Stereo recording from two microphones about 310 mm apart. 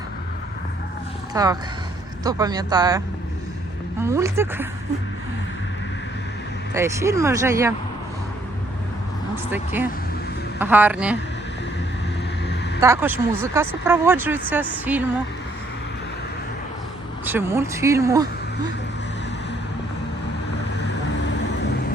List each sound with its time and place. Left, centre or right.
1.3 s speech: centre
4.0 s speech: centre
6.7 s speech: centre
9.5 s speech: centre
12.8 s speech: centre
17.2 s speech: centre
20.8 s vehicle: left